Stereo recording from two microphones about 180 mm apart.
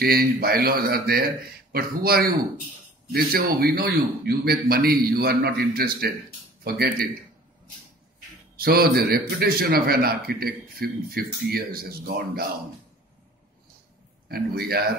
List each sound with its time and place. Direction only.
0.0 s a man's voice: 60° right (ahead or behind)
8.5 s a man's voice: 60° right (ahead or behind)
14.3 s a man's voice: 60° right (ahead or behind)